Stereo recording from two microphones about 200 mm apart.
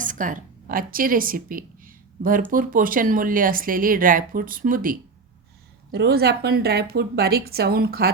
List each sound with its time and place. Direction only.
0.0 s speech: 40° right (ahead or behind)